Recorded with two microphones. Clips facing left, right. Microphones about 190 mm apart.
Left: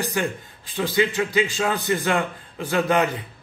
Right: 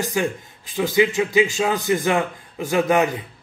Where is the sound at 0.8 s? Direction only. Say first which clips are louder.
Right 3 dB; 20° right (ahead or behind).